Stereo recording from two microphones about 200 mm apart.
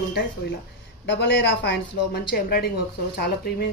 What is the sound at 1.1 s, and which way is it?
A woman's voice, 60° left (ahead or behind).